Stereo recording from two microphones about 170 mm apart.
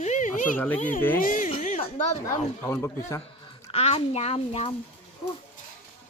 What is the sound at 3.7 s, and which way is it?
Speech, 35° left (ahead or behind).